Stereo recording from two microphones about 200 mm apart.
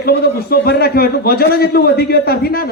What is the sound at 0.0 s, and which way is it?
A man's voice, 50° left (ahead or behind).